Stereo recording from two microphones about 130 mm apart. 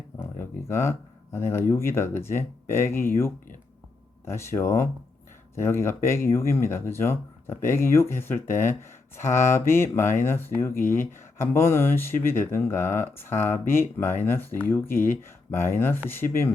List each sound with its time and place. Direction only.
0.2 s speech: 20° left (ahead or behind)
4.3 s speech: 20° left (ahead or behind)